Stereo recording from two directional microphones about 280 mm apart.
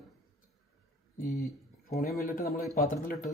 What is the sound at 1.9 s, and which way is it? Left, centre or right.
A man's voice, left.